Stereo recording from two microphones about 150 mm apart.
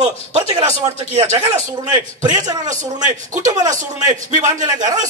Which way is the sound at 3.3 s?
25° right (ahead or behind).